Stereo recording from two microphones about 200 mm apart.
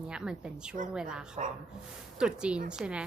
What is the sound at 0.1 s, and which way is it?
A woman's voice, 5° right (ahead or behind).